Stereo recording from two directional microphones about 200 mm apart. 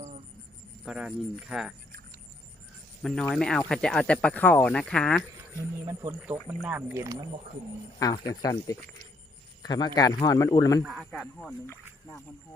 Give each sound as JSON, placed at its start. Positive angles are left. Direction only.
{"t": 0.9, "sound": "speech", "side_deg": -5}
{"t": 3.0, "sound": "speech", "side_deg": 5}
{"t": 5.8, "sound": "speech", "side_deg": -15}
{"t": 7.9, "sound": "a man's voice", "side_deg": 20}
{"t": 10.8, "sound": "speech", "side_deg": 0}